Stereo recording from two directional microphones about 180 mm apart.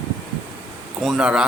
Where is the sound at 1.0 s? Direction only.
5° right (ahead or behind).